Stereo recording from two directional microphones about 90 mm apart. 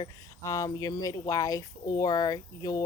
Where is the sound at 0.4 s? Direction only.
40° left (ahead or behind).